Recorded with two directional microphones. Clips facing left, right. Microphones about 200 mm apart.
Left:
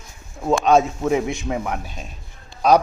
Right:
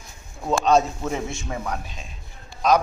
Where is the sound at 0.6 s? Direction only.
10° left (ahead or behind).